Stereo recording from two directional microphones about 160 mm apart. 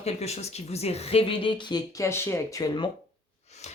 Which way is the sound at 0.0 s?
40° left (ahead or behind).